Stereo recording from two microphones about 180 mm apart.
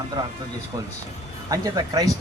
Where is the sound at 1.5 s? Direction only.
20° right (ahead or behind).